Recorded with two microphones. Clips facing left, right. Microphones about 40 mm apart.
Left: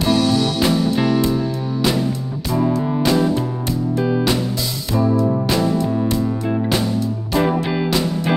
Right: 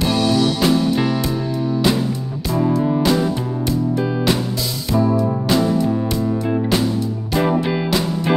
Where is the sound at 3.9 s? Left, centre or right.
Centre.